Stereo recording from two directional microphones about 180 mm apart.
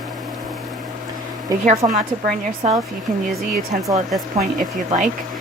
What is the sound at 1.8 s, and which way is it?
Speech, 25° right (ahead or behind).